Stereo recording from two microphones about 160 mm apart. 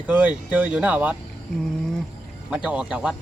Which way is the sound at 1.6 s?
5° left (ahead or behind).